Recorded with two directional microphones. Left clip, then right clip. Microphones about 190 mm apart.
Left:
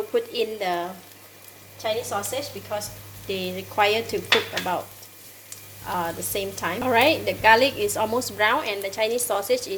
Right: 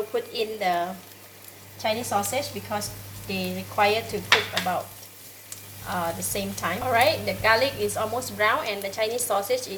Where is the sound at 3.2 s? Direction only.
45° left (ahead or behind).